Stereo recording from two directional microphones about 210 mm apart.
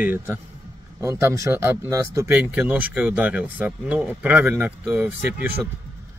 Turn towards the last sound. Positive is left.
turn(degrees=-5)  # may be behind; listen again after turning